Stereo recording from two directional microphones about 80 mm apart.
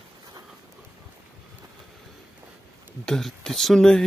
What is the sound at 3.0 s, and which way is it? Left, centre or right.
Speech, centre.